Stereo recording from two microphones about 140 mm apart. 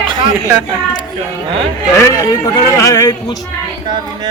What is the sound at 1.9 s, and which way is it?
Speech, 20° left (ahead or behind).